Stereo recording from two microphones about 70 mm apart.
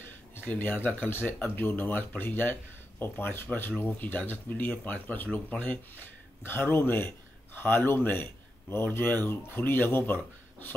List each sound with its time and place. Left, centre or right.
0.5 s a man's voice: left